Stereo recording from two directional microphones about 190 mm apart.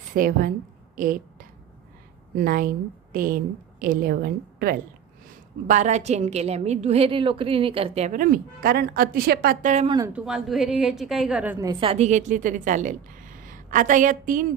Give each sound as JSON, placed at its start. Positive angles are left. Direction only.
{"t": 0.1, "sound": "a woman's voice", "side_deg": -50}
{"t": 0.9, "sound": "a sound", "side_deg": -45}
{"t": 2.4, "sound": "a woman's voice", "side_deg": -50}
{"t": 9.8, "sound": "speech", "side_deg": -20}
{"t": 10.1, "sound": "a woman's voice", "side_deg": -5}
{"t": 11.7, "sound": "a woman's voice", "side_deg": -30}